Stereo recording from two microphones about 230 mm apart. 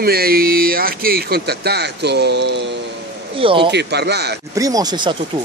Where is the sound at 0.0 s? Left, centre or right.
Right.